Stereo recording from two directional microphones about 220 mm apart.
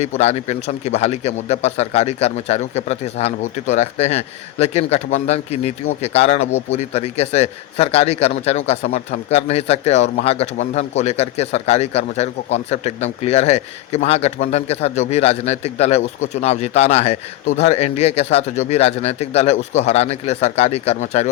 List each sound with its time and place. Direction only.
0.0 s a man's voice: 30° left (ahead or behind)